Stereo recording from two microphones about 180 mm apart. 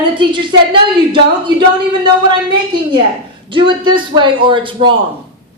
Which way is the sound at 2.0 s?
25° right (ahead or behind).